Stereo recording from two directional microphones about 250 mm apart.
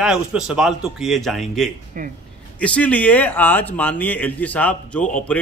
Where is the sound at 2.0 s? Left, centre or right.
Right.